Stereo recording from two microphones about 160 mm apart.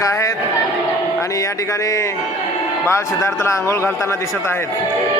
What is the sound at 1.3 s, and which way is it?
A man's voice, 20° left (ahead or behind).